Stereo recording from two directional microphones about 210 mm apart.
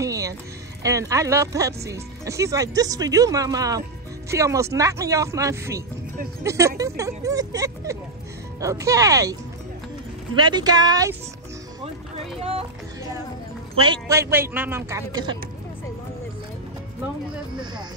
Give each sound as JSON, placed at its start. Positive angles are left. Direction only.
{"t": 0.0, "sound": "music", "side_deg": -15}
{"t": 0.8, "sound": "speech", "side_deg": -15}
{"t": 12.4, "sound": "speech", "side_deg": -25}
{"t": 13.7, "sound": "speech", "side_deg": -20}